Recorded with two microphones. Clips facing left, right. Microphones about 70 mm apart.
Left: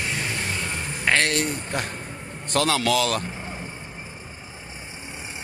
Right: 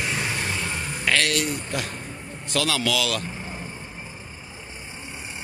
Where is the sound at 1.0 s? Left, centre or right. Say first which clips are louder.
Left 1 dB; left.